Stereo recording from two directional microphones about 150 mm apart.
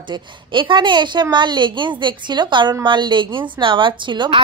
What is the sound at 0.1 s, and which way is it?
A woman's voice, 35° right (ahead or behind).